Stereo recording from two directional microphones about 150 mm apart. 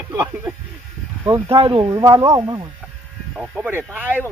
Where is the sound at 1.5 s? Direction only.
40° right (ahead or behind).